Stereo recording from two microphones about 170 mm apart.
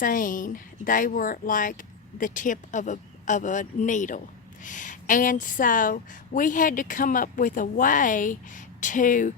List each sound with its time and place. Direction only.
0.0 s speech: 50° left (ahead or behind)